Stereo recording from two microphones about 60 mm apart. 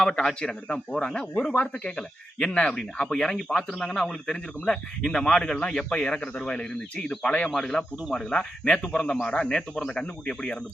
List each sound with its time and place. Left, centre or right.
0.1 s speech: centre
0.3 s speech: centre
7.5 s speech: centre